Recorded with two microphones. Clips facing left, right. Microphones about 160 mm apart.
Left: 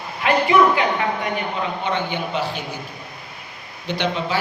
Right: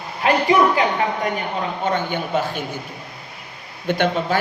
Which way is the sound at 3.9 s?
50° right (ahead or behind).